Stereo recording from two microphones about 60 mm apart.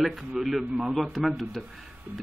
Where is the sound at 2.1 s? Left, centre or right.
Right.